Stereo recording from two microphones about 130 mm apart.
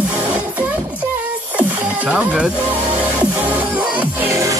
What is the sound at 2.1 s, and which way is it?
Music, 5° right (ahead or behind).